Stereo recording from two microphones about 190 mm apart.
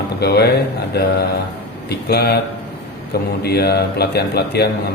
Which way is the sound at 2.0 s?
55° left (ahead or behind).